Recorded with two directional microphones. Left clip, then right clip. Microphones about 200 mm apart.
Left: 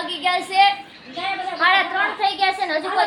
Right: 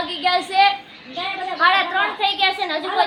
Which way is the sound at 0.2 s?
15° right (ahead or behind).